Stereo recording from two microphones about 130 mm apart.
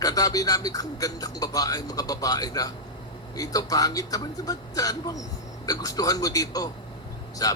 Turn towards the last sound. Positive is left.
turn(degrees=30)  # may be behind; listen again after turning